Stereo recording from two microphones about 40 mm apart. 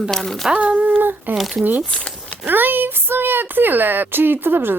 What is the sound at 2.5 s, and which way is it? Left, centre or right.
Speech, right.